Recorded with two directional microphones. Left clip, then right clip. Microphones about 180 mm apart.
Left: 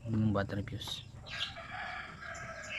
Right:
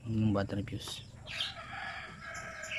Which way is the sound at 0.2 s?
5° right (ahead or behind).